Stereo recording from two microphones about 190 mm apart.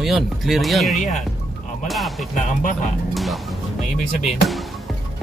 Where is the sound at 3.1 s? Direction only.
Centre (ahead or behind).